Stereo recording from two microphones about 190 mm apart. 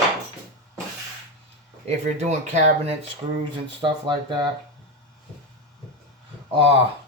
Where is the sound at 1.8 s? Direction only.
35° right (ahead or behind).